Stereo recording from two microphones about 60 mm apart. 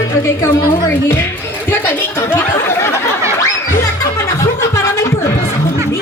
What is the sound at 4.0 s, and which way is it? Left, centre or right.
Music, left.